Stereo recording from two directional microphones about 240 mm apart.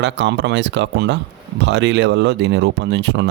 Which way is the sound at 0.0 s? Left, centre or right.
Right.